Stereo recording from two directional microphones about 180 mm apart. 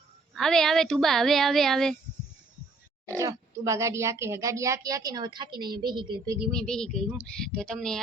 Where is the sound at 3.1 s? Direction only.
15° right (ahead or behind).